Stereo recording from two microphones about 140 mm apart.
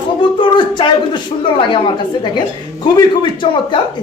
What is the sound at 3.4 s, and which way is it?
Speech, 35° left (ahead or behind).